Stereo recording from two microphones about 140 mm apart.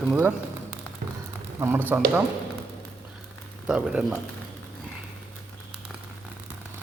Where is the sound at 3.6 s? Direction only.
5° right (ahead or behind).